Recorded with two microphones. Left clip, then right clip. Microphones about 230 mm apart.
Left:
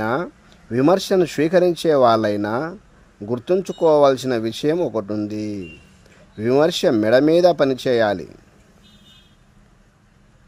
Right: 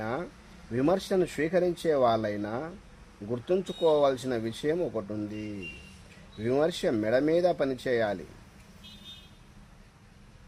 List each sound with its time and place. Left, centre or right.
0.0 s speech: left